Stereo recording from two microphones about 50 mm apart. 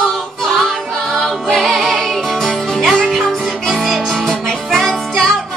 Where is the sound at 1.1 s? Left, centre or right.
Centre.